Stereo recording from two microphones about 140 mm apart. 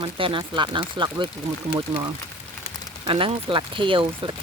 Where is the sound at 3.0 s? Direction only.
35° right (ahead or behind).